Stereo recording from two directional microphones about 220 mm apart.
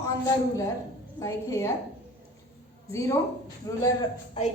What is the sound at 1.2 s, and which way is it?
Speech, 15° left (ahead or behind).